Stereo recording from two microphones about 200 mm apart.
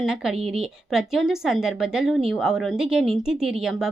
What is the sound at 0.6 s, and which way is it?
Speech, centre (ahead or behind).